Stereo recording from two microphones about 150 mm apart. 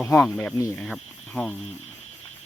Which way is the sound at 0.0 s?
10° left (ahead or behind).